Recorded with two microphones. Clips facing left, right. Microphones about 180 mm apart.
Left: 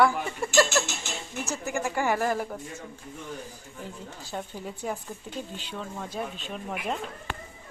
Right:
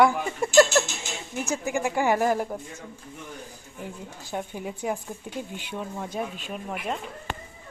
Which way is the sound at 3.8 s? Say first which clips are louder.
Right 3 dB; 15° right (ahead or behind).